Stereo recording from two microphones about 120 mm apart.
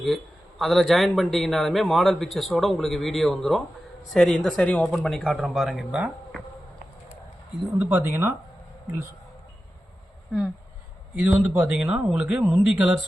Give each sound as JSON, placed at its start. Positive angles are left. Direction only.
{"t": 0.6, "sound": "a man's voice", "side_deg": 0}
{"t": 7.8, "sound": "speech", "side_deg": -20}
{"t": 10.3, "sound": "a man's voice", "side_deg": 5}
{"t": 11.1, "sound": "speech", "side_deg": -10}